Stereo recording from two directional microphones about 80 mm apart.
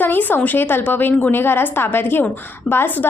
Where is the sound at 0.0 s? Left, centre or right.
Left.